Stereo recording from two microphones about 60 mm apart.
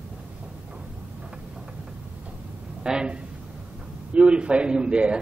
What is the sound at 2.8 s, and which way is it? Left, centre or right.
A man's voice, centre.